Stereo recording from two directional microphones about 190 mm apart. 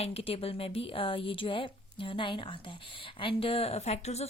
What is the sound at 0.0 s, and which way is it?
A woman's voice, 30° left (ahead or behind).